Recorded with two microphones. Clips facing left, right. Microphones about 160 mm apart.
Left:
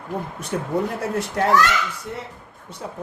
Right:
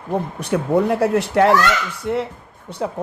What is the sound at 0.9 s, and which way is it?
Speech, 70° right (ahead or behind).